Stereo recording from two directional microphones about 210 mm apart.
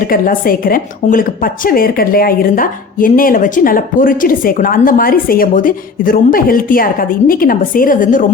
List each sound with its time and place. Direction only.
0.0 s a woman's voice: 45° left (ahead or behind)